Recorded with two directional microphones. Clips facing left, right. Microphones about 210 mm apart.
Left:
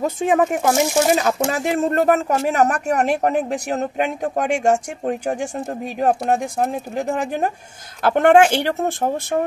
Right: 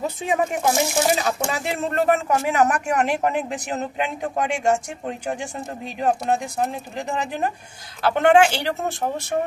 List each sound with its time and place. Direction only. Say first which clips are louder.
0.0 s speech: left 5 dB; 50° left (ahead or behind)